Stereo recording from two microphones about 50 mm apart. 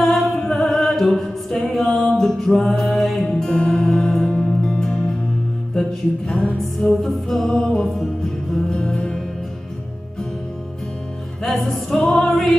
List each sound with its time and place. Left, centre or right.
0.0 s music: centre
5.8 s mantra: centre
6.8 s music: centre
11.4 s music: centre
12.0 s music: centre
12.3 s music: centre